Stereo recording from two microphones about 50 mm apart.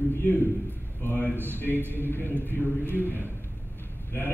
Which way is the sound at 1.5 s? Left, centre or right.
Left.